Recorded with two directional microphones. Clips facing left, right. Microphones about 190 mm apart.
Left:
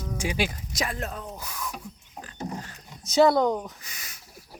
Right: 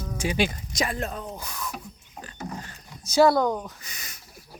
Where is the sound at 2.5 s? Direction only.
Centre (ahead or behind).